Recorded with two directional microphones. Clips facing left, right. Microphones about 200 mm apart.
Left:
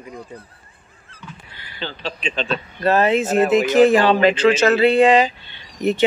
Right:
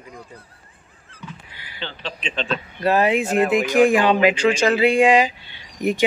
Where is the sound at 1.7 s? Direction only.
40° left (ahead or behind).